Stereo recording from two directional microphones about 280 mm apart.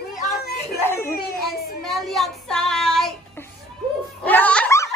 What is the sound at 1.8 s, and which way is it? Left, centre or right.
Child singing, centre.